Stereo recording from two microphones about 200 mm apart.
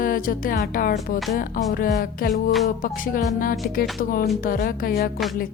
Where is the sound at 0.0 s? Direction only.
45° left (ahead or behind).